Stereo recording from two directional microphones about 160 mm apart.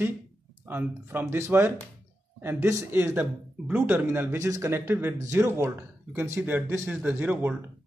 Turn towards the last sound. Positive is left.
turn(degrees=-10)  # may be behind; listen again after turning